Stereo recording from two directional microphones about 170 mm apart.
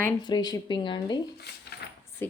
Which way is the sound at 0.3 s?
25° left (ahead or behind).